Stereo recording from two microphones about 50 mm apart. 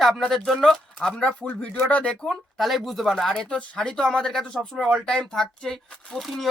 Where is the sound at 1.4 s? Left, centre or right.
Left.